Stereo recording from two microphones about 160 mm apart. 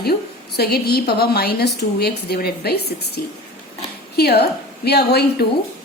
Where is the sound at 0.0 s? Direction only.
80° left.